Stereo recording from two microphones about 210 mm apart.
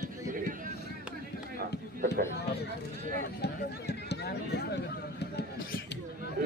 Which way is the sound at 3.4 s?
55° left (ahead or behind).